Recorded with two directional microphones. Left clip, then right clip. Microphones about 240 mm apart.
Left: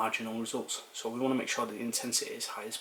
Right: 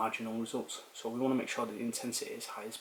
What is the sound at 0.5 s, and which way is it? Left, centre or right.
Speech, centre.